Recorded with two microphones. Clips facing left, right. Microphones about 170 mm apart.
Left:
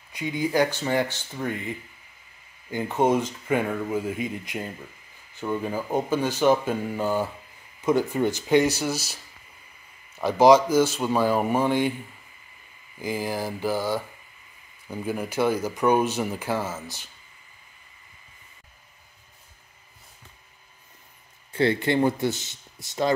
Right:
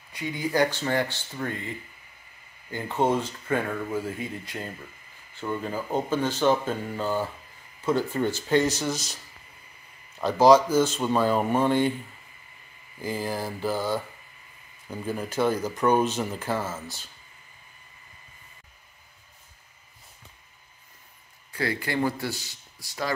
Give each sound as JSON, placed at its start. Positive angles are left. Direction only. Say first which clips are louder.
{"t": 0.1, "sound": "speech", "louder": "left 3 dB", "side_deg": 15}
{"t": 13.0, "sound": "speech", "louder": "left 2 dB", "side_deg": 15}
{"t": 21.5, "sound": "speech", "louder": "left 7 dB", "side_deg": 25}